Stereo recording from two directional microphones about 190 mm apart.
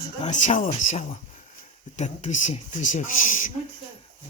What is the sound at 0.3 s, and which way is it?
Speech, 40° left (ahead or behind).